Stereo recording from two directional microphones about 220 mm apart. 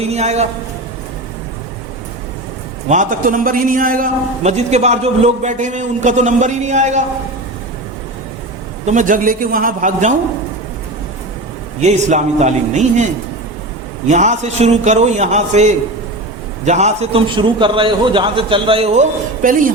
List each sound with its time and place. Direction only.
0.0 s a man's voice: 30° right (ahead or behind)
2.9 s a man's voice: 35° right (ahead or behind)
8.9 s a man's voice: 35° right (ahead or behind)
11.8 s a man's voice: 30° right (ahead or behind)
14.1 s a man's voice: 30° right (ahead or behind)